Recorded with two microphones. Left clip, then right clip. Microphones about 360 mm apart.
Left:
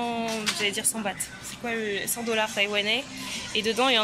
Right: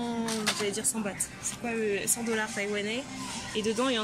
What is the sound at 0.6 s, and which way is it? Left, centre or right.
Speech, centre.